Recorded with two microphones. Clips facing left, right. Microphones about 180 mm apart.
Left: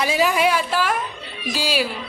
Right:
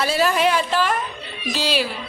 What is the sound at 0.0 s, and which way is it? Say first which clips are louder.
A man's voice: even; 15° left (ahead or behind).